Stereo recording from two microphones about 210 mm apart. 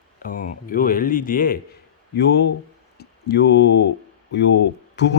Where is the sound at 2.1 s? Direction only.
50° left (ahead or behind).